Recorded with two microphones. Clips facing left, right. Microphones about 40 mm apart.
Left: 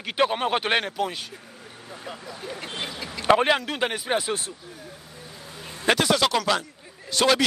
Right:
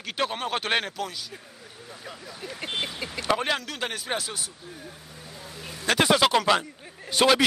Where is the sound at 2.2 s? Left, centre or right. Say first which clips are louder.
Left 1 dB; left.